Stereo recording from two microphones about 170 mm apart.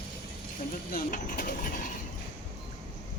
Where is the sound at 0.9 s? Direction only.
55° left (ahead or behind).